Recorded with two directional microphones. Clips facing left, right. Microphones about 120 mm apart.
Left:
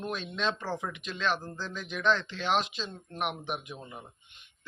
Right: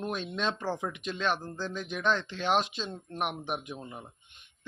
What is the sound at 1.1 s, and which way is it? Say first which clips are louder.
Speech: even; 45° right (ahead or behind).